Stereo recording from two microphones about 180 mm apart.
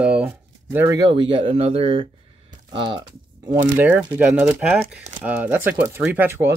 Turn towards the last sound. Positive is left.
turn(degrees=-10)  # may be behind; listen again after turning